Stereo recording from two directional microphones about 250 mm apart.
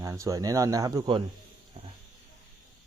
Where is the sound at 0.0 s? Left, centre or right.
Centre.